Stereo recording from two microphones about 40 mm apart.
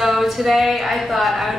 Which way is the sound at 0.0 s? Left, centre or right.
Centre.